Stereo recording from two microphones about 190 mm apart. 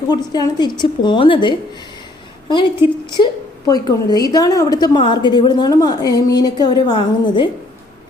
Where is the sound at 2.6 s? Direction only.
25° left (ahead or behind).